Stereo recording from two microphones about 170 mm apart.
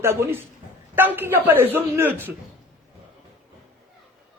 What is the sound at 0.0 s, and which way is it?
A man's voice, 15° right (ahead or behind).